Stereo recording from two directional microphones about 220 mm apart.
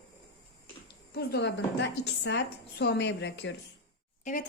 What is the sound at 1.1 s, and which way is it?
A woman's voice, 50° left (ahead or behind).